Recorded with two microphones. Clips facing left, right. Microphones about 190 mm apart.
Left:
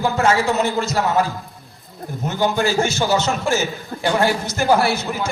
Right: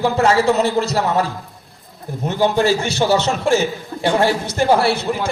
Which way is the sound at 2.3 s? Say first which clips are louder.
Right 4 dB; 30° right (ahead or behind).